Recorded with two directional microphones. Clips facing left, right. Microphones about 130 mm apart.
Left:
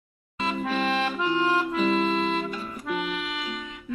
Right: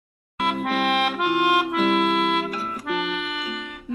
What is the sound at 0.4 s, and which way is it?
Accordion, 65° right (ahead or behind).